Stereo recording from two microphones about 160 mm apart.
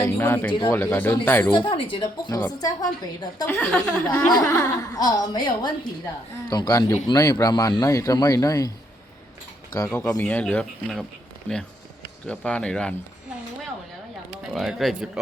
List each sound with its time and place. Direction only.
0.0 s speech: 15° left (ahead or behind)
1.5 s speech: 30° left (ahead or behind)
3.4 s speech: 10° left (ahead or behind)
4.3 s speech: 20° left (ahead or behind)
9.7 s speech: 20° left (ahead or behind)
10.2 s speech: 10° left (ahead or behind)
12.3 s speech: 5° left (ahead or behind)
14.5 s speech: centre (ahead or behind)